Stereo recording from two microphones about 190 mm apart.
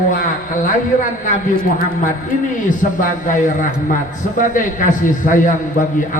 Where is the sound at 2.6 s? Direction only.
40° left (ahead or behind).